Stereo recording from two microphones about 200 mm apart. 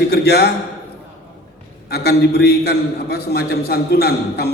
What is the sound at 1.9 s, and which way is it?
A man's voice, 55° left (ahead or behind).